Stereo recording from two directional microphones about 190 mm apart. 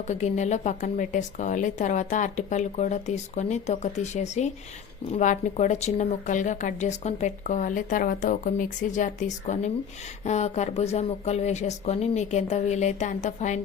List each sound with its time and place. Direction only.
0.1 s speech: 40° left (ahead or behind)